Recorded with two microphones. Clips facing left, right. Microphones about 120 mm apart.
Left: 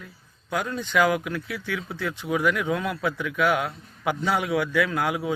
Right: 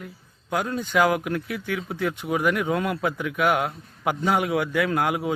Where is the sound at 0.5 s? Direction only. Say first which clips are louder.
Right 1 dB; 40° right (ahead or behind).